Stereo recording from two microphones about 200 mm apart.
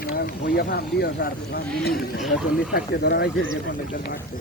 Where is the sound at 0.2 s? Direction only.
55° left (ahead or behind).